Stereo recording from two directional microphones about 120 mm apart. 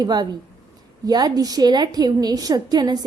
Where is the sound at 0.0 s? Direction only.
35° right (ahead or behind).